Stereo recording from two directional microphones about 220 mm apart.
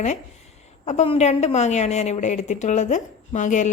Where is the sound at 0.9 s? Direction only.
30° left (ahead or behind).